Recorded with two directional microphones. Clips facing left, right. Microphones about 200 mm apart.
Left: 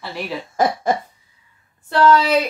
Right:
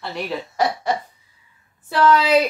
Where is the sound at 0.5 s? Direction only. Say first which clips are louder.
Left 3 dB; 50° left (ahead or behind).